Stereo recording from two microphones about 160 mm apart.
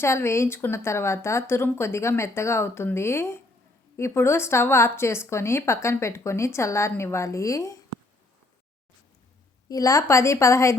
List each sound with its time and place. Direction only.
0.0 s a woman's voice: 15° left (ahead or behind)
9.6 s a woman's voice: 20° left (ahead or behind)